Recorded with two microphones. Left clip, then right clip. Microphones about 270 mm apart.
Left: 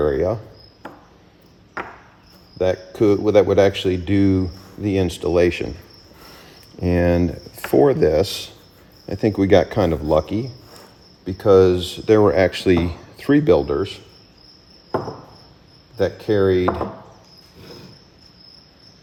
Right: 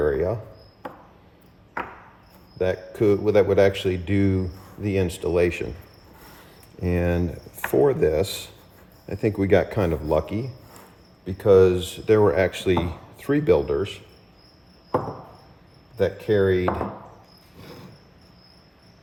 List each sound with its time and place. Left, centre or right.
0.0 s speech: left
2.6 s speech: left
6.8 s speech: left
16.0 s speech: left